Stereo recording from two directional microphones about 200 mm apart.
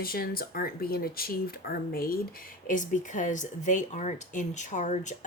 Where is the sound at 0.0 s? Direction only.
50° left (ahead or behind).